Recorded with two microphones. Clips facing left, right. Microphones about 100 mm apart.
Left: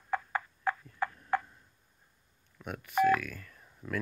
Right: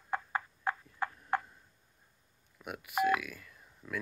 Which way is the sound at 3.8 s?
15° left (ahead or behind).